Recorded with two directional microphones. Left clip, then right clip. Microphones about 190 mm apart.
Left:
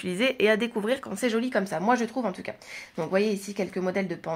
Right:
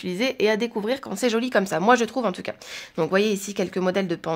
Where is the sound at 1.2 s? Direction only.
35° right (ahead or behind).